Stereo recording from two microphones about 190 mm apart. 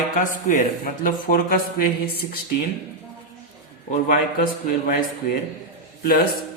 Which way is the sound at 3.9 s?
45° left (ahead or behind).